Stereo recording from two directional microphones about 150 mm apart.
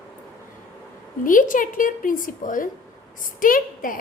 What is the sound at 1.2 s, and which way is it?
A woman's voice, 60° left (ahead or behind).